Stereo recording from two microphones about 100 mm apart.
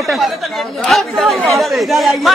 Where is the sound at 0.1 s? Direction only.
Centre (ahead or behind).